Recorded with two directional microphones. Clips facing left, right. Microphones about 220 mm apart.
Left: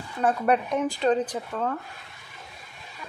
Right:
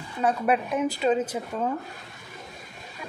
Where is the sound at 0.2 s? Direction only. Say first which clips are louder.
Left 1 dB; 5° right (ahead or behind).